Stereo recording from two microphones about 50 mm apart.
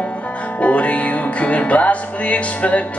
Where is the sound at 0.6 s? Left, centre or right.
Left.